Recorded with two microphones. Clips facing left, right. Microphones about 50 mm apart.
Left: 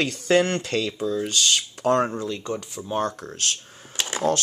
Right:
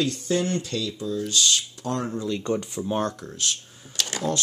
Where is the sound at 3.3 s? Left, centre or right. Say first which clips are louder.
Left 1 dB; left.